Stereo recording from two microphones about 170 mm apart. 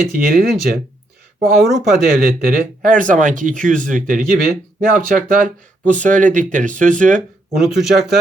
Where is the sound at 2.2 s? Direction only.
55° right (ahead or behind).